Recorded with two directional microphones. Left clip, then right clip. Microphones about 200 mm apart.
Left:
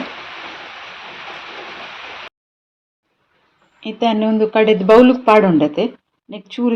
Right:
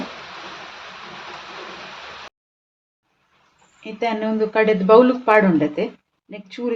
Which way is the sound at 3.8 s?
35° left (ahead or behind).